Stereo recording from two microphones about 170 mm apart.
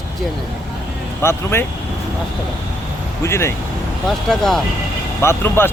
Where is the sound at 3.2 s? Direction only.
15° left (ahead or behind).